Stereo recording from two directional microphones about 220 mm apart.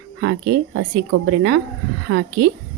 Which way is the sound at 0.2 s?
65° right (ahead or behind).